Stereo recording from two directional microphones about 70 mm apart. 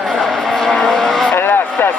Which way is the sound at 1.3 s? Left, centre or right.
Left.